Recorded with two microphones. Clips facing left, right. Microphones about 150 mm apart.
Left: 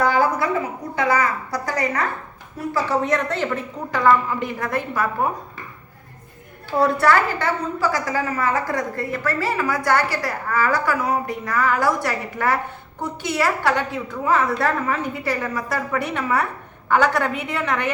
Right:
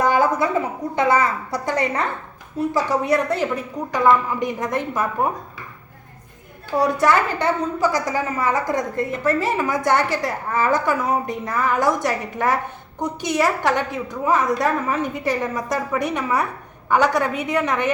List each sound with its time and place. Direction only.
0.0 s a sound: 20° right (ahead or behind)
0.9 s a woman's voice: 25° right (ahead or behind)
6.7 s a woman's voice: 15° right (ahead or behind)